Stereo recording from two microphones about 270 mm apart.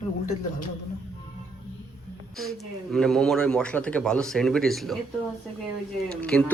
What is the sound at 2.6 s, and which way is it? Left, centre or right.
Speech, centre.